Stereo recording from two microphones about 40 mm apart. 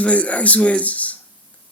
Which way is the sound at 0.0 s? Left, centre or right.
Left.